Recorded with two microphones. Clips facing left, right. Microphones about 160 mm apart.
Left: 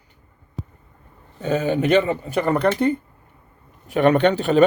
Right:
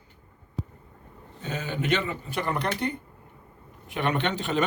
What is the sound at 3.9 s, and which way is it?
Speech, 45° left (ahead or behind).